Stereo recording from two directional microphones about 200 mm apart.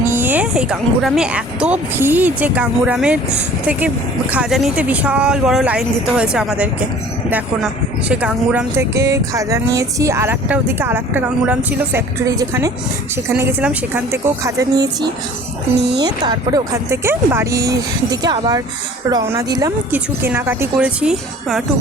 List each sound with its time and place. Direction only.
0.1 s a woman's voice: 10° right (ahead or behind)